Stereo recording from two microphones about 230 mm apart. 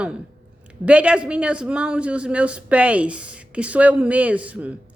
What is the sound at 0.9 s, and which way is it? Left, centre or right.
A woman's voice, centre.